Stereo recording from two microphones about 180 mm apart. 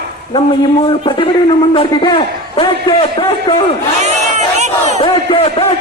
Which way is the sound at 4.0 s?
40° right (ahead or behind).